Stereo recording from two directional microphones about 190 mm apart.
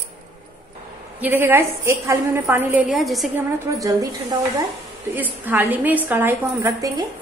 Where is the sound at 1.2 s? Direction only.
10° right (ahead or behind).